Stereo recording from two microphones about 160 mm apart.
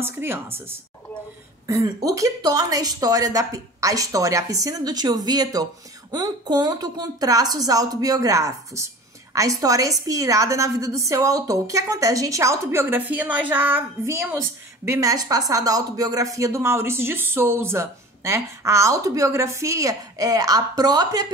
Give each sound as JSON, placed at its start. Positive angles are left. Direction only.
{"t": 0.0, "sound": "a woman's voice", "side_deg": -15}